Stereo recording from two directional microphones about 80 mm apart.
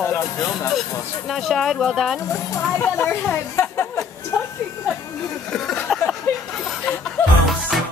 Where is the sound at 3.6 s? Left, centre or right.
Left.